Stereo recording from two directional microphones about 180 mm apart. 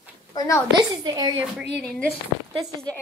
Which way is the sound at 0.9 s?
20° right (ahead or behind).